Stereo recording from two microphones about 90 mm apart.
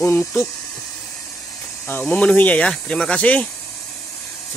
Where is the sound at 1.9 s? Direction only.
15° left (ahead or behind).